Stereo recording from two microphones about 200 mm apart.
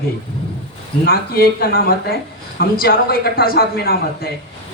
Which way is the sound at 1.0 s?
50° left (ahead or behind).